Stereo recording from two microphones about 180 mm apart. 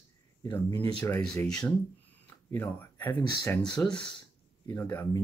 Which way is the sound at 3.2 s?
20° left (ahead or behind).